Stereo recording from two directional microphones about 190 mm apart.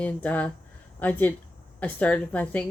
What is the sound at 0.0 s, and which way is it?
A woman's voice, 10° left (ahead or behind).